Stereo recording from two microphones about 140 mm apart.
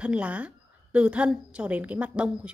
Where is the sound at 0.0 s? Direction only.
10° right (ahead or behind).